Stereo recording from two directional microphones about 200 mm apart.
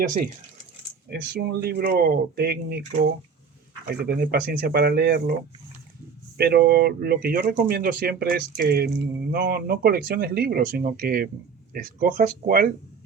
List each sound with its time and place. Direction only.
1.1 s speech: 50° right (ahead or behind)
3.8 s speech: 50° right (ahead or behind)